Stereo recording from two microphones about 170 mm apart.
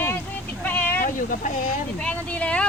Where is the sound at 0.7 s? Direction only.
10° left (ahead or behind).